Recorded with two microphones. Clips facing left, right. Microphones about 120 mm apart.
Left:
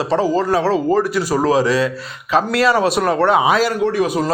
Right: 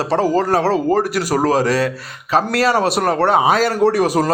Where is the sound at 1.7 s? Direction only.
60° right (ahead or behind).